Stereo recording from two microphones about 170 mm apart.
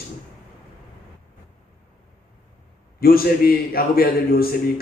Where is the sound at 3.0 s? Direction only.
60° left (ahead or behind).